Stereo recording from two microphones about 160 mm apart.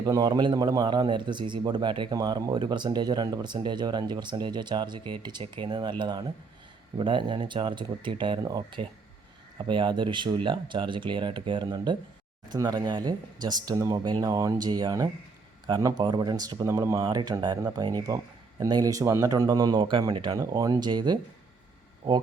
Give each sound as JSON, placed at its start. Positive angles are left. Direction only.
{"t": 0.0, "sound": "a man's voice", "side_deg": -25}